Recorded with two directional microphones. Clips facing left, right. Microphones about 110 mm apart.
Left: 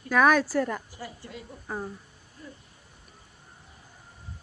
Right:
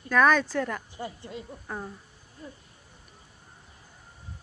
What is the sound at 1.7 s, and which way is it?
Speech, 5° left (ahead or behind).